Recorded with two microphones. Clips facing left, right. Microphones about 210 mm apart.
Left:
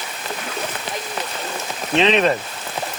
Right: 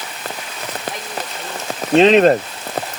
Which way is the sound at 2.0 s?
45° right (ahead or behind).